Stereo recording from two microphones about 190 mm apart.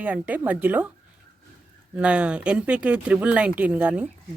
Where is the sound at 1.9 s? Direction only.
5° right (ahead or behind).